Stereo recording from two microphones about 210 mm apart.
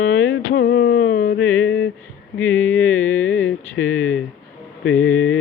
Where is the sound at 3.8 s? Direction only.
75° left (ahead or behind).